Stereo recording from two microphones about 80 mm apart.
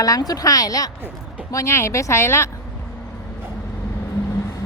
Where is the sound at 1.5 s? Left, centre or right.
Left.